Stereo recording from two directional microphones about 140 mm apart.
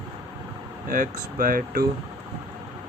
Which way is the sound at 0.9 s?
75° right (ahead or behind).